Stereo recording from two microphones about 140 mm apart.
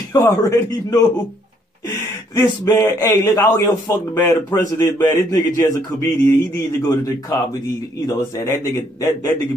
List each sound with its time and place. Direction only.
0.1 s speech: 25° left (ahead or behind)